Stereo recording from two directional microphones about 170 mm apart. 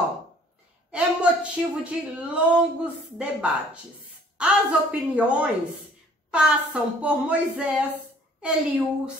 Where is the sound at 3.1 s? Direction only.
5° right (ahead or behind).